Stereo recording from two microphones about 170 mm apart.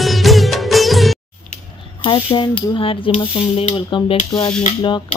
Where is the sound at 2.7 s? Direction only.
30° left (ahead or behind).